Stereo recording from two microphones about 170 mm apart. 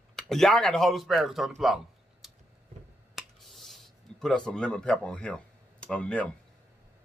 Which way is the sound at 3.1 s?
Centre (ahead or behind).